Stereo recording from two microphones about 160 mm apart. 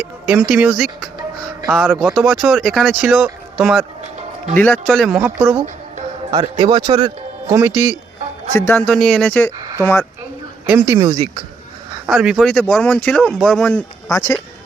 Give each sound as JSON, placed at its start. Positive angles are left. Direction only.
{"t": 0.3, "sound": "a man's voice", "side_deg": -10}
{"t": 4.5, "sound": "speech", "side_deg": 10}
{"t": 4.9, "sound": "a man's voice", "side_deg": 0}
{"t": 6.3, "sound": "speech", "side_deg": -25}
{"t": 6.8, "sound": "speech", "side_deg": -40}
{"t": 7.5, "sound": "speech", "side_deg": -15}
{"t": 8.5, "sound": "speech", "side_deg": 10}
{"t": 10.7, "sound": "speech", "side_deg": -15}
{"t": 12.0, "sound": "a man's voice", "side_deg": 0}
{"t": 14.1, "sound": "speech", "side_deg": 20}